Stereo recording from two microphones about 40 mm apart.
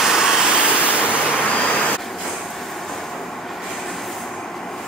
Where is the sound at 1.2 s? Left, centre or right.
Left.